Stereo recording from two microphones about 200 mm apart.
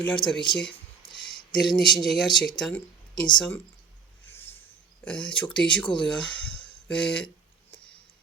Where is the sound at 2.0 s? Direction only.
Centre (ahead or behind).